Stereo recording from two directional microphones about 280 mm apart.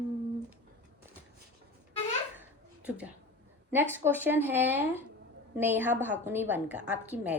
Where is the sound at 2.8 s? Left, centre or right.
Centre.